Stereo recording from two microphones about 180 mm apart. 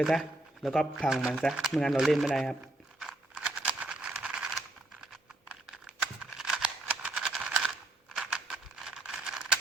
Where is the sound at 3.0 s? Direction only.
5° right (ahead or behind).